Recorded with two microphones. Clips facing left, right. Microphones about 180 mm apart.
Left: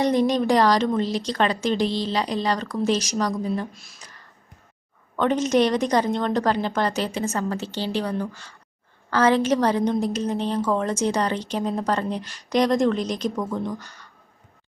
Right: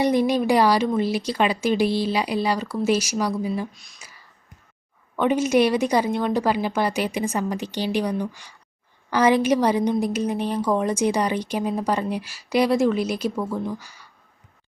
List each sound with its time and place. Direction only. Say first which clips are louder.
0.0 s a woman's voice: even; 10° right (ahead or behind)